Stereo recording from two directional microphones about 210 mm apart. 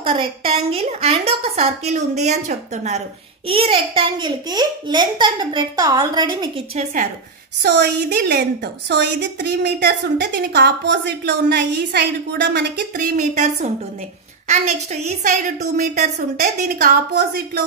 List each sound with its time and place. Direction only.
0.0 s a child's voice: 25° right (ahead or behind)
7.6 s a woman's voice: 55° right (ahead or behind)
17.1 s a woman's voice: 50° right (ahead or behind)